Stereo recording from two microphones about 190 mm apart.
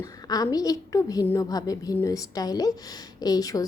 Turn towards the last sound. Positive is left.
turn(degrees=20)  # may be behind; listen again after turning